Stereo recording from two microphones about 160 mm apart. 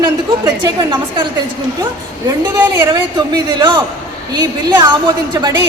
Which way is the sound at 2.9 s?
30° right (ahead or behind).